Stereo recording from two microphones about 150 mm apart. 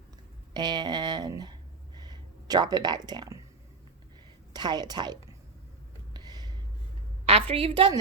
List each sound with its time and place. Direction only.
0.5 s speech: 30° right (ahead or behind)
4.5 s a woman's voice: 30° right (ahead or behind)
6.1 s a sound: 25° right (ahead or behind)
7.3 s a woman's voice: 40° right (ahead or behind)